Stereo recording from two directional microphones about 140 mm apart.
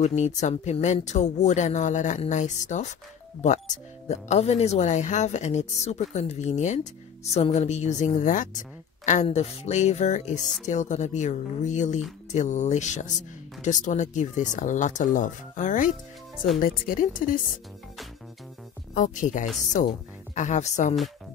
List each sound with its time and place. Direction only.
0.0 s speech: 55° left (ahead or behind)
16.6 s speech: 90° left
18.9 s speech: 65° left (ahead or behind)
20.3 s speech: 55° left (ahead or behind)